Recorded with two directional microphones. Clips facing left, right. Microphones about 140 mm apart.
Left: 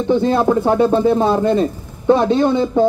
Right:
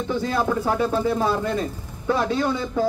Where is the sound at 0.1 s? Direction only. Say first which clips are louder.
Left 9 dB; 25° left (ahead or behind).